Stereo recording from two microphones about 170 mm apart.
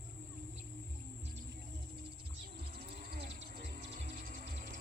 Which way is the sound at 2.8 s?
65° right (ahead or behind).